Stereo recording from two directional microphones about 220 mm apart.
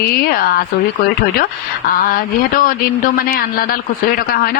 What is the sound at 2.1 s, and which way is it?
A woman's voice, 40° left (ahead or behind).